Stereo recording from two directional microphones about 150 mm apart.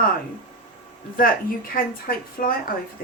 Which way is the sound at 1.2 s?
75° left (ahead or behind).